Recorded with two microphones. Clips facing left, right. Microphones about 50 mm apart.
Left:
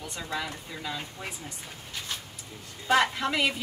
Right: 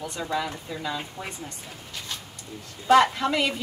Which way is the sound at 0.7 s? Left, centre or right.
Centre.